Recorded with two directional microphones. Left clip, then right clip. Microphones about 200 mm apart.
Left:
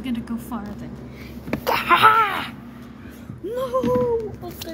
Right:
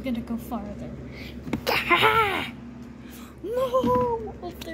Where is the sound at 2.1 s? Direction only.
30° right (ahead or behind).